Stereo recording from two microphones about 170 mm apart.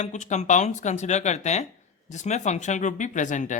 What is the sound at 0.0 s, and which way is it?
Speech, 45° left (ahead or behind).